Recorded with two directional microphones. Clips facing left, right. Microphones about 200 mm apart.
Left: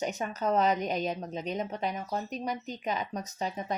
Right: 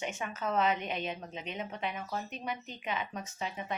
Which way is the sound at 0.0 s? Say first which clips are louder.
Left 5 dB; 40° left (ahead or behind).